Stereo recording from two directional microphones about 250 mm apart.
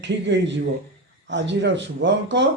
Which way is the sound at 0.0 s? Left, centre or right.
Right.